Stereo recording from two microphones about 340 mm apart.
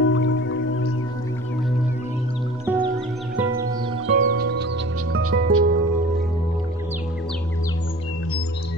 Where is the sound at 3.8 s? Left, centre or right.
Centre; by 5.7 s right.